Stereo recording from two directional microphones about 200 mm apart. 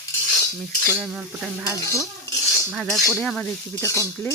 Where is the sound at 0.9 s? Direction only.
5° right (ahead or behind).